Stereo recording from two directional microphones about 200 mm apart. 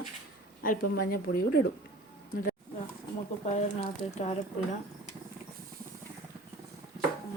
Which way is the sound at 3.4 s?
35° left (ahead or behind).